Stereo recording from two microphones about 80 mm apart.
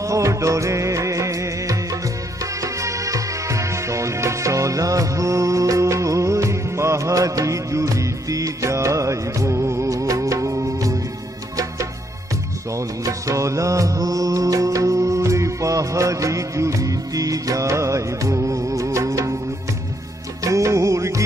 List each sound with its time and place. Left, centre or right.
0.0 s music: right
12.7 s music: right
20.4 s music of bollywood: right